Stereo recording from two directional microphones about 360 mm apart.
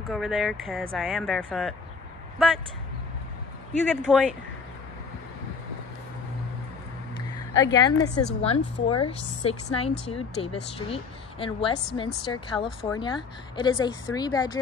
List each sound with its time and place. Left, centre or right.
0.1 s speech: centre
3.9 s speech: centre
7.5 s speech: centre
12.5 s speech: centre
12.9 s speech: centre